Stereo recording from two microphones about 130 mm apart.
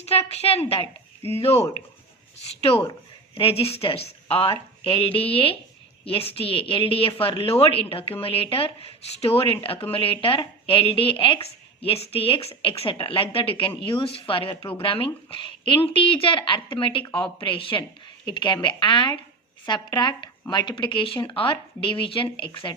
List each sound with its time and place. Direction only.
0.0 s speech: 50° left (ahead or behind)